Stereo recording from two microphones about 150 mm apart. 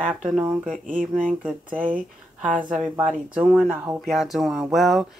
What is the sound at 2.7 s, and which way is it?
Speech, 10° right (ahead or behind).